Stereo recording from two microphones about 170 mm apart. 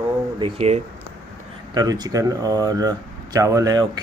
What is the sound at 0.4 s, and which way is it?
Speech, 35° right (ahead or behind).